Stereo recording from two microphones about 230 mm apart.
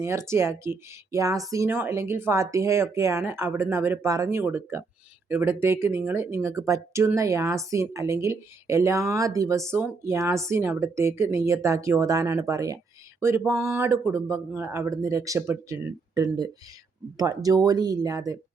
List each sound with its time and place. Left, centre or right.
0.0 s speech: centre